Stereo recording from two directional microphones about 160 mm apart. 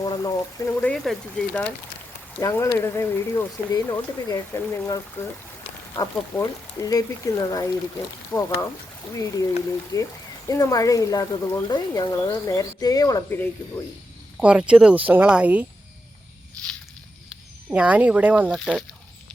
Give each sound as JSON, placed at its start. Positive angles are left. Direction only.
{"t": 0.0, "sound": "speech", "side_deg": 25}
{"t": 2.4, "sound": "speech", "side_deg": 15}
{"t": 14.4, "sound": "speech", "side_deg": -5}
{"t": 17.7, "sound": "speech", "side_deg": -10}
{"t": 18.6, "sound": "speech", "side_deg": 5}